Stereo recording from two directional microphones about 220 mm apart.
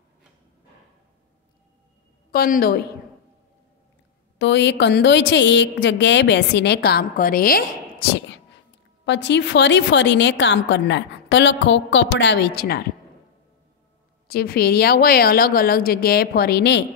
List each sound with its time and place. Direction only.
2.3 s a woman's voice: 45° left (ahead or behind)
4.4 s a woman's voice: 55° left (ahead or behind)
14.2 s a woman's voice: 45° left (ahead or behind)